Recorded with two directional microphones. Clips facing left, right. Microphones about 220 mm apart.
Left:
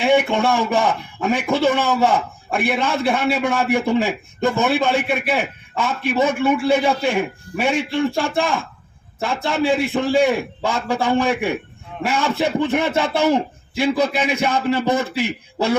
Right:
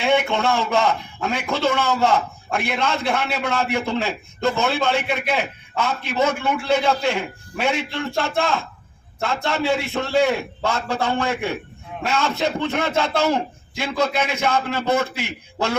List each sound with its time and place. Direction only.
0.0 s a man's voice: 15° left (ahead or behind)